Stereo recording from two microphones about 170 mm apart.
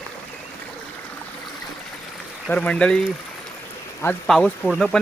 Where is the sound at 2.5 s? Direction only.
5° left (ahead or behind).